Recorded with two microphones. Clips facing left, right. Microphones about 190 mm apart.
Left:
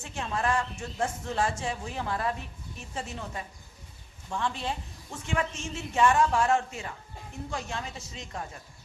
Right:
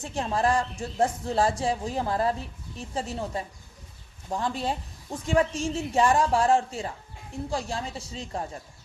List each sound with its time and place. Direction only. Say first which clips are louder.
0.0 s speech: right 5 dB; 35° right (ahead or behind)